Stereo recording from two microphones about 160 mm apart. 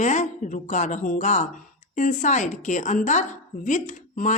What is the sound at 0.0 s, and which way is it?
Speech, 50° left (ahead or behind).